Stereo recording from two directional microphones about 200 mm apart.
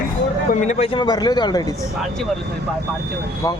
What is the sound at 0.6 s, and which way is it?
A man's voice, 25° left (ahead or behind).